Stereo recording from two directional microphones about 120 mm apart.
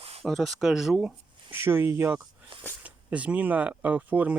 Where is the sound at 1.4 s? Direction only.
20° right (ahead or behind).